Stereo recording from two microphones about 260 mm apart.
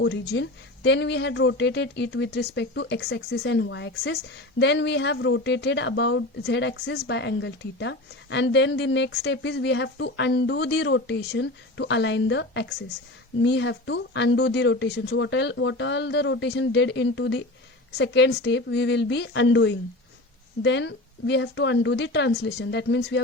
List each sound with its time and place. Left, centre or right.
0.0 s a woman's voice: left